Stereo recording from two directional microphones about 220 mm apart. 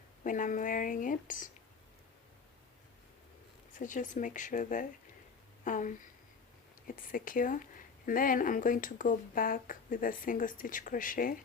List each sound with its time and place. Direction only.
0.3 s speech: 35° left (ahead or behind)
3.8 s speech: 35° left (ahead or behind)